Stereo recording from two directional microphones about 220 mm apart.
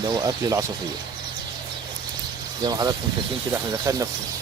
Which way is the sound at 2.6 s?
15° right (ahead or behind).